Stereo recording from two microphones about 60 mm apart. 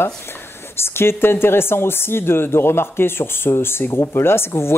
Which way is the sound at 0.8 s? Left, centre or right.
Left.